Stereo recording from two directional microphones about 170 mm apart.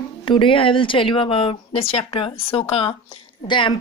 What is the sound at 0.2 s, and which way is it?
A woman's voice, 30° left (ahead or behind).